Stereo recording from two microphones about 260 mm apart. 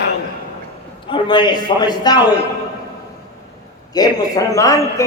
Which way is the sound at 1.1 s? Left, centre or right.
Centre.